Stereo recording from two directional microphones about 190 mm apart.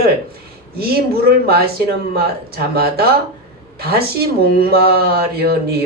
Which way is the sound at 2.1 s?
55° right (ahead or behind).